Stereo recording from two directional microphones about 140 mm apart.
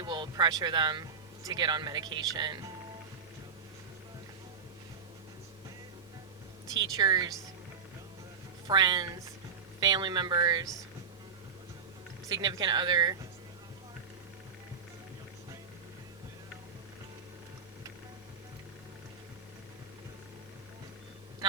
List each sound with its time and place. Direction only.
0.0 s speech: 30° right (ahead or behind)
6.7 s a woman's voice: 30° right (ahead or behind)
8.6 s a woman's voice: 30° right (ahead or behind)
12.3 s speech: 30° right (ahead or behind)